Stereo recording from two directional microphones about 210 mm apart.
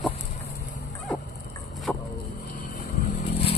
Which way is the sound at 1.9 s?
5° left (ahead or behind).